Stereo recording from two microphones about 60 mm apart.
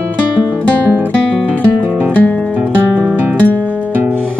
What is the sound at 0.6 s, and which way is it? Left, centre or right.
Music, right.